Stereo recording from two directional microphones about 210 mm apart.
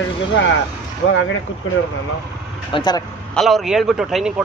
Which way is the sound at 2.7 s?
20° left (ahead or behind).